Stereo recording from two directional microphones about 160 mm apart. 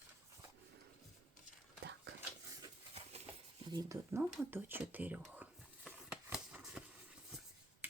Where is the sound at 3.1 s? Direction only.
40° right (ahead or behind).